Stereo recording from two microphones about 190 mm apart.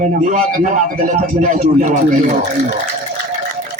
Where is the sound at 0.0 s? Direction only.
45° right (ahead or behind).